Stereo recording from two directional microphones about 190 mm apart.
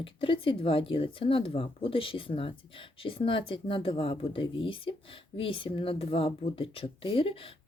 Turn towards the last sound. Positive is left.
turn(degrees=30)  # may be behind; listen again after turning